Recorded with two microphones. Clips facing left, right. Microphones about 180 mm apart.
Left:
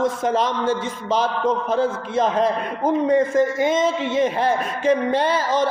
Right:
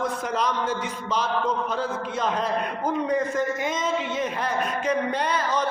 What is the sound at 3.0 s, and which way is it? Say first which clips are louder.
A man's voice: left 8 dB; 30° left (ahead or behind).